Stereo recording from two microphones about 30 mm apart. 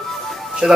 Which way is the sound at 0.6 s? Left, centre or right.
Right.